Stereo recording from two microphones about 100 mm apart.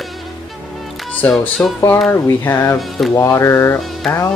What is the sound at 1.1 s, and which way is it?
Speech, 10° left (ahead or behind).